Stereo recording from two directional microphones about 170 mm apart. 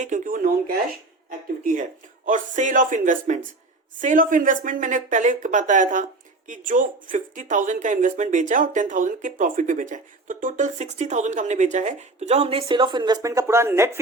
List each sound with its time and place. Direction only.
0.0 s speech: 50° right (ahead or behind); by 14.0 s 15° right (ahead or behind)